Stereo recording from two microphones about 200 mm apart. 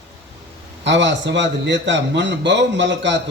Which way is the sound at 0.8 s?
65° right (ahead or behind).